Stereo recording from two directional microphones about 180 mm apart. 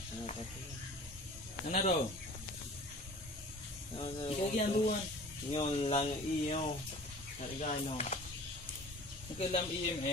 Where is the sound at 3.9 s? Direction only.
30° left (ahead or behind).